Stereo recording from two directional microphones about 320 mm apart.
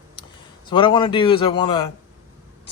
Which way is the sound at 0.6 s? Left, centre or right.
Centre.